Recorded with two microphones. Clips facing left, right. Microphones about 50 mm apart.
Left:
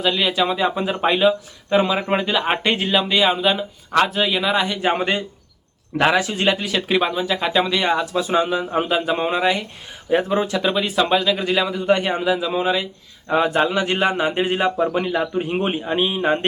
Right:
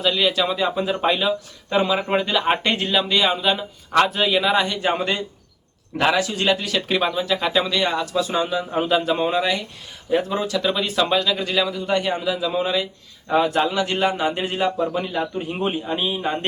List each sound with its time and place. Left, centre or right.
0.0 s a man's voice: centre; by 16.5 s left